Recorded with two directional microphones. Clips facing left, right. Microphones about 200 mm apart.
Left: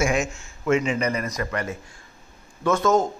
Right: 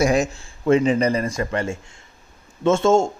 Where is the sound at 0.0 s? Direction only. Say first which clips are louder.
Right 5 dB; 35° right (ahead or behind).